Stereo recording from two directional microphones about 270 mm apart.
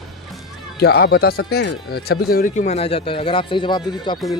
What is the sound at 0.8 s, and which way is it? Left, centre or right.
Speech, left.